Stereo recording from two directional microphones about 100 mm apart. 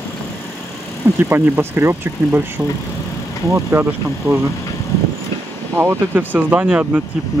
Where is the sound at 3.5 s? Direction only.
25° right (ahead or behind).